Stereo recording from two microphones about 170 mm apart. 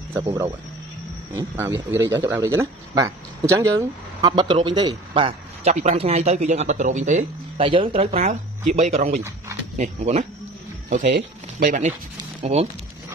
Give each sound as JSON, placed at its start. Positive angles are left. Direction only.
{"t": 1.3, "sound": "speech", "side_deg": -20}
{"t": 7.6, "sound": "speech", "side_deg": -30}
{"t": 12.4, "sound": "speech", "side_deg": -40}